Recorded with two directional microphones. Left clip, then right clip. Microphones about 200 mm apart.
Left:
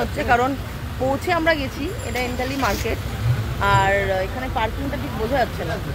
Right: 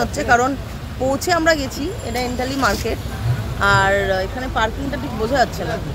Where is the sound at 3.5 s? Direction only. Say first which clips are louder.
Right 3 dB; 15° right (ahead or behind).